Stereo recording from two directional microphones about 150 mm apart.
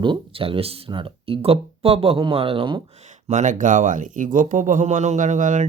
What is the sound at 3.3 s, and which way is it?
Speech, 55° right (ahead or behind).